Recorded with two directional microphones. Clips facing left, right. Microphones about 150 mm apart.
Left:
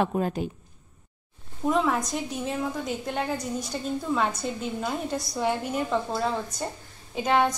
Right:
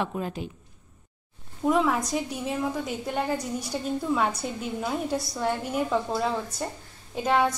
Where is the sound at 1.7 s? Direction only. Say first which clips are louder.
Right 1 dB; 5° right (ahead or behind).